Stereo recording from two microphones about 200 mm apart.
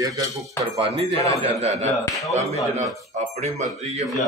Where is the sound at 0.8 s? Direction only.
30° right (ahead or behind).